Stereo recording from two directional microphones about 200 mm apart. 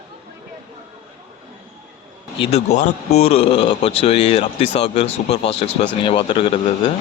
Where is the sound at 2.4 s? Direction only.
30° left (ahead or behind).